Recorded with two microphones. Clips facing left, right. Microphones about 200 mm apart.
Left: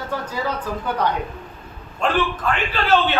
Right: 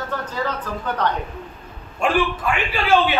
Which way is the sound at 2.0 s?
10° right (ahead or behind).